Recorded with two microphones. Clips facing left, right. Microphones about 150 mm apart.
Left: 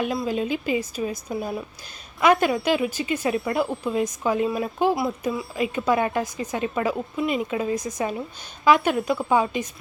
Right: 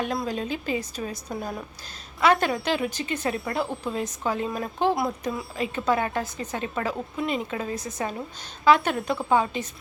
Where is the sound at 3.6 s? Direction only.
Centre (ahead or behind).